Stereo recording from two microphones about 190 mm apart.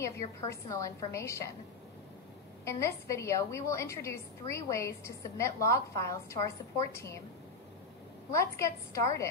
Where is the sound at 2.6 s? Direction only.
15° left (ahead or behind).